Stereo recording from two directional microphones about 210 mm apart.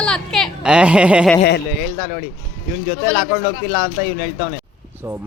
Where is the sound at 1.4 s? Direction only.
50° left (ahead or behind).